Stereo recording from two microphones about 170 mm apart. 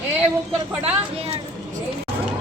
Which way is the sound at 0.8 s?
35° right (ahead or behind).